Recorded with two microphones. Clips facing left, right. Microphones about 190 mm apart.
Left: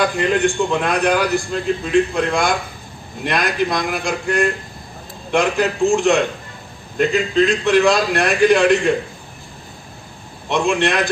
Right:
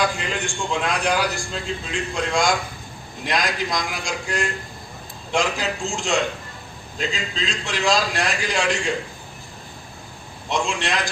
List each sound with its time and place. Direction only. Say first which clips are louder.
0.0 s a man's voice: left 8 dB; 60° left (ahead or behind)
10.5 s a man's voice: left 7 dB; 60° left (ahead or behind)